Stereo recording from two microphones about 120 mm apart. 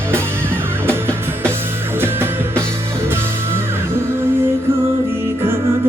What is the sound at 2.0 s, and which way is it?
Music, 20° right (ahead or behind).